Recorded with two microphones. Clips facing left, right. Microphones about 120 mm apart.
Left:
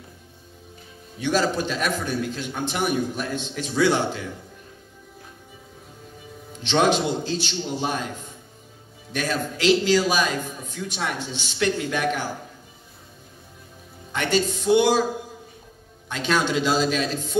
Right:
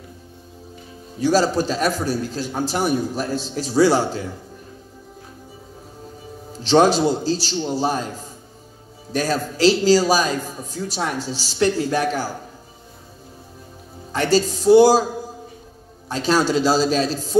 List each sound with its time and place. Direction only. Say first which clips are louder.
1.2 s a man's voice: right 5 dB; 35° right (ahead or behind)
6.5 s a man's voice: right 5 dB; 35° right (ahead or behind)
14.1 s a man's voice: right 4 dB; 35° right (ahead or behind)
16.1 s a man's voice: right 4 dB; 35° right (ahead or behind)